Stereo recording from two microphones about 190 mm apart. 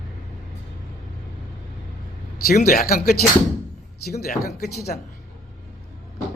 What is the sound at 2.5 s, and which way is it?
Speech, 50° left (ahead or behind).